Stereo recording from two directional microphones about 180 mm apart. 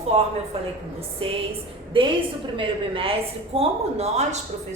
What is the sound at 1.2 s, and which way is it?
A woman's voice, 30° right (ahead or behind).